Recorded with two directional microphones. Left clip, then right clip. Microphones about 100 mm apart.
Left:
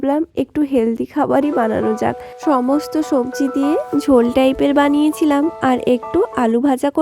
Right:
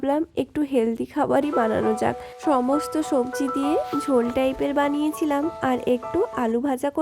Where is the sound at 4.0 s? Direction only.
85° left.